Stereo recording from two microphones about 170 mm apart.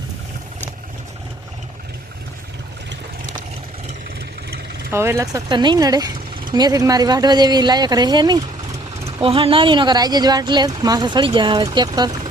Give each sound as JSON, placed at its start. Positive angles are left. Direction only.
{"t": 4.9, "sound": "speech", "side_deg": -15}